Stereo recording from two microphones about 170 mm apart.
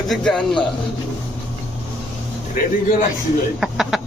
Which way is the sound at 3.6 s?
Centre (ahead or behind).